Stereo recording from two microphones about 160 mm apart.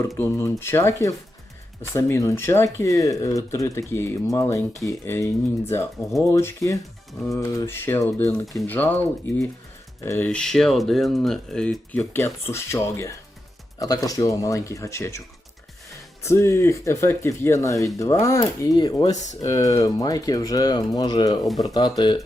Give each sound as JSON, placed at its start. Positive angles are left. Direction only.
{"t": 0.2, "sound": "speech", "side_deg": 15}
{"t": 10.2, "sound": "speech", "side_deg": 5}
{"t": 16.2, "sound": "speech", "side_deg": 15}
{"t": 19.1, "sound": "speech", "side_deg": 50}
{"t": 19.4, "sound": "speech", "side_deg": 20}